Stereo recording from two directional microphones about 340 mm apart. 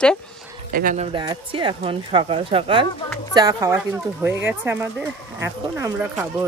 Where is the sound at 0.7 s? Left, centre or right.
Right.